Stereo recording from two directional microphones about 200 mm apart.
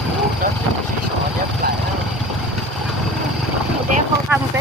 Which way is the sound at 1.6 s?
50° right (ahead or behind).